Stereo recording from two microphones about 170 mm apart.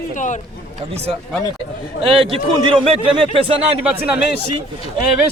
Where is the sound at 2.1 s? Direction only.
30° right (ahead or behind).